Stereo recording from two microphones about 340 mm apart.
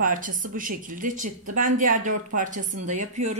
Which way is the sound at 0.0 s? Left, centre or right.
Right.